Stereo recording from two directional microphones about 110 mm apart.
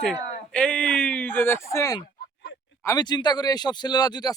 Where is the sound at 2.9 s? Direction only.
40° left (ahead or behind).